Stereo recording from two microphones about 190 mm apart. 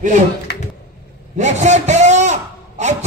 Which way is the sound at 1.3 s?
40° right (ahead or behind).